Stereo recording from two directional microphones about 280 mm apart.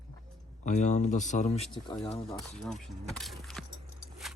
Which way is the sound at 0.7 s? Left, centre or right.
Left.